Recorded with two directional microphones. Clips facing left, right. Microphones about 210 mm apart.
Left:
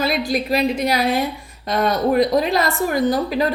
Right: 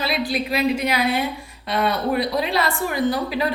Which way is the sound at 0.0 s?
45° left (ahead or behind).